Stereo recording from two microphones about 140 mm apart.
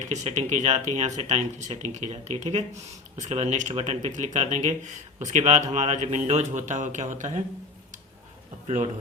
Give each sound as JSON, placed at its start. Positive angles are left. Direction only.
{"t": 0.1, "sound": "speech", "side_deg": -55}
{"t": 8.6, "sound": "a man's voice", "side_deg": -50}